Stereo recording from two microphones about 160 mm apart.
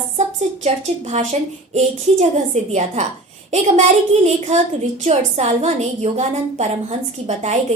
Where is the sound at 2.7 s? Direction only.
45° right (ahead or behind).